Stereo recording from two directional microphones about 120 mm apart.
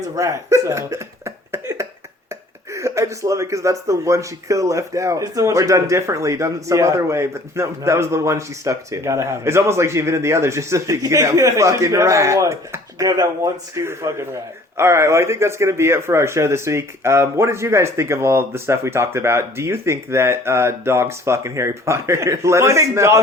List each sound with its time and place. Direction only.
0.2 s hiccup: 25° right (ahead or behind)
2.7 s speech: 25° right (ahead or behind)